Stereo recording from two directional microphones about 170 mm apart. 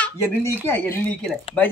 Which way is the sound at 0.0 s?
15° left (ahead or behind).